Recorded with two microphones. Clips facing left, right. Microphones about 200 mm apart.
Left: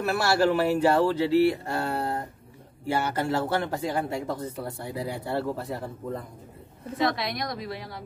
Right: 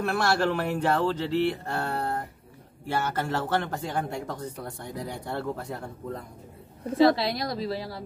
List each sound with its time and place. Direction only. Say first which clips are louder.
0.0 s speech: left 2 dB; 5° left (ahead or behind)
7.0 s a woman's voice: right 6 dB; 30° right (ahead or behind)